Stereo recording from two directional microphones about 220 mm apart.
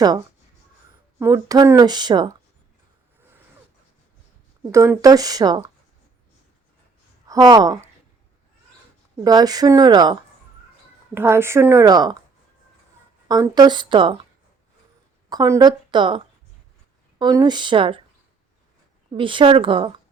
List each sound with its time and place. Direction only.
1.2 s speech: 15° right (ahead or behind)
4.7 s speech: 15° right (ahead or behind)
7.3 s speech: 20° right (ahead or behind)
9.2 s speech: 15° right (ahead or behind)
13.2 s a woman's voice: 15° right (ahead or behind)
15.3 s a woman's voice: 15° right (ahead or behind)
19.1 s a woman's voice: 20° right (ahead or behind)